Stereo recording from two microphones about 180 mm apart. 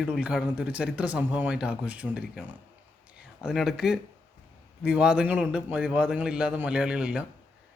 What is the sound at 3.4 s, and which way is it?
A man's voice, centre (ahead or behind).